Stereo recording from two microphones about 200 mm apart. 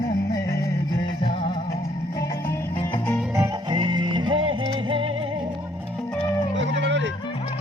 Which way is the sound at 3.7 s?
25° right (ahead or behind).